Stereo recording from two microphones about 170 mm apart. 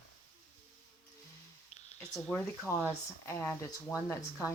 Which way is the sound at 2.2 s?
5° left (ahead or behind).